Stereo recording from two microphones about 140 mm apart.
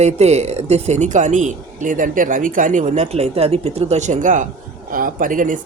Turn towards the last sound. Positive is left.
turn(degrees=-70)  # may be behind; listen again after turning